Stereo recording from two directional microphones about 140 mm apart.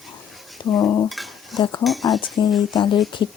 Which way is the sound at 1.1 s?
Centre (ahead or behind).